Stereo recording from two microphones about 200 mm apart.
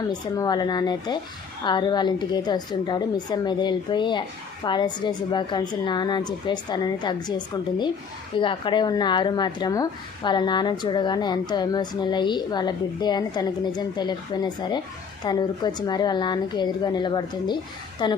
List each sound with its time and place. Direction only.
0.1 s speech: 20° left (ahead or behind)